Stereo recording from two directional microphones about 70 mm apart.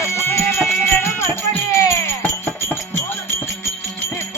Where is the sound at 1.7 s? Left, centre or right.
Left.